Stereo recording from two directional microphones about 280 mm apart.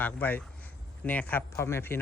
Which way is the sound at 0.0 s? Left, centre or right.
Centre.